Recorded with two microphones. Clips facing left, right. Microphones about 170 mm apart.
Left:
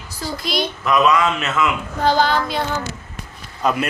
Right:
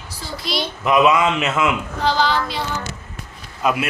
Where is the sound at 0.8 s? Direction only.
15° right (ahead or behind).